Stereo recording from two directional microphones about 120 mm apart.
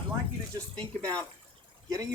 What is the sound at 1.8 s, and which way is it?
Speech, 30° right (ahead or behind).